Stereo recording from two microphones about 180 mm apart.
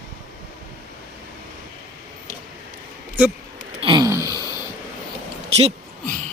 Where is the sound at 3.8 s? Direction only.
20° right (ahead or behind).